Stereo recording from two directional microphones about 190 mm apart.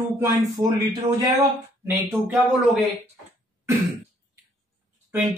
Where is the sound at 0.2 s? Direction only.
20° right (ahead or behind).